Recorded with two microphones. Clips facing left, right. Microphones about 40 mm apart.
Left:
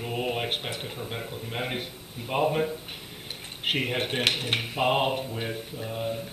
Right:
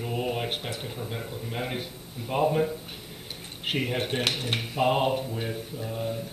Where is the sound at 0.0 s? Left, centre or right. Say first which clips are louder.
Even; centre.